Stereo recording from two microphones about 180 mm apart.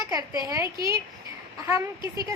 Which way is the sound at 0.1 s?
20° right (ahead or behind).